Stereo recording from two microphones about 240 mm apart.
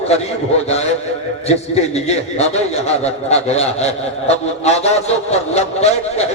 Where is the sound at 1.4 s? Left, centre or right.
Left.